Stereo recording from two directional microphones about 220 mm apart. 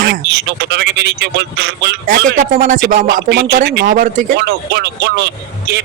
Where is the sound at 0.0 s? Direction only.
50° right (ahead or behind).